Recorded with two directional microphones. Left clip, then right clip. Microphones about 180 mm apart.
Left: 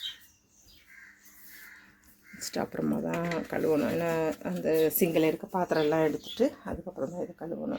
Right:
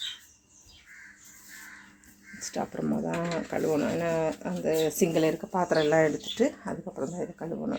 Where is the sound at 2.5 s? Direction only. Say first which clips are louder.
Even; 25° left (ahead or behind).